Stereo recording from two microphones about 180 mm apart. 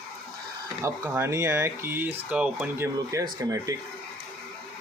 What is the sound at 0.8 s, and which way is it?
Speech, 15° right (ahead or behind).